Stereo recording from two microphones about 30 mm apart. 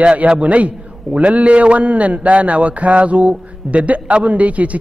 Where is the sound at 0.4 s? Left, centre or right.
Right.